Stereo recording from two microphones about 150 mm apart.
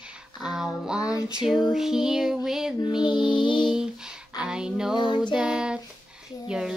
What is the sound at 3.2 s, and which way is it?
Music, 35° left (ahead or behind).